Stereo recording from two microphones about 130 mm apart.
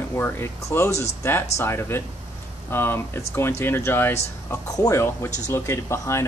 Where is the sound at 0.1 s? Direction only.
20° left (ahead or behind).